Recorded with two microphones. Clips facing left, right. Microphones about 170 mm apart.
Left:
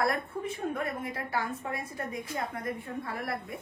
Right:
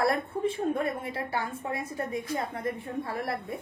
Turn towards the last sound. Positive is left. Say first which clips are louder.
# right 3 dB
turn(degrees=-25)  # may be behind; listen again after turning